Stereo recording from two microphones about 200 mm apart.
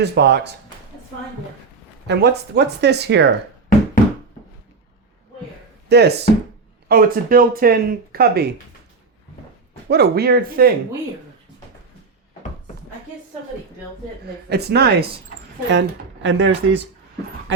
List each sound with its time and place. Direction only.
0.0 s speech: 60° right (ahead or behind)
2.0 s speech: 55° right (ahead or behind)
5.9 s speech: 55° right (ahead or behind)
9.9 s speech: 55° right (ahead or behind)
14.5 s speech: 55° right (ahead or behind)
15.7 s speech: 65° right (ahead or behind)